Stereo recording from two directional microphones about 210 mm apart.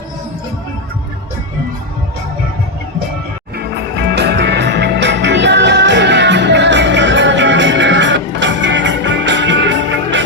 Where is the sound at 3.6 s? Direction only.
50° right (ahead or behind).